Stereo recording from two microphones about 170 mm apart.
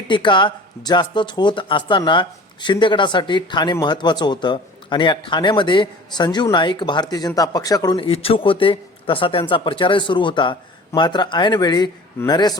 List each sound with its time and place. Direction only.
0.1 s speech: 25° left (ahead or behind)